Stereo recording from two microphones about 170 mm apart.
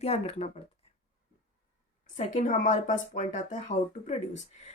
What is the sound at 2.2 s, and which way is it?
Speech, 45° left (ahead or behind).